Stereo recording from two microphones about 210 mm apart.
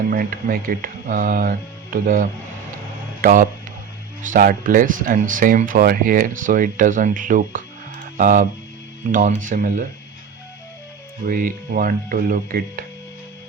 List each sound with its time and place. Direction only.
0.1 s speech: 40° right (ahead or behind)
11.3 s speech: 40° right (ahead or behind)